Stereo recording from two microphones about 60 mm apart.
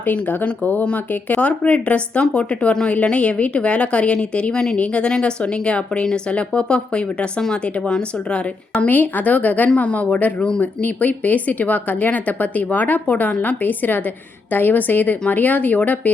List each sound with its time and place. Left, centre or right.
0.0 s a woman's voice: left